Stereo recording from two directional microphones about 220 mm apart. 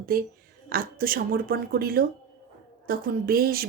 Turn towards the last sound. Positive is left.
turn(degrees=-45)  # may be behind; listen again after turning